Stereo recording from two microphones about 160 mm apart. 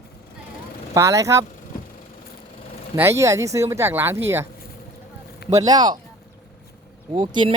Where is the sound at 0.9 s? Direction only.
20° right (ahead or behind).